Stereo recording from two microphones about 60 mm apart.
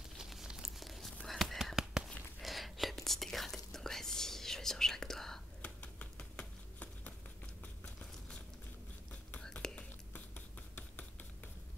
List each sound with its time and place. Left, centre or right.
0.2 s whispering: centre
5.6 s a sound: left
9.4 s whispering: centre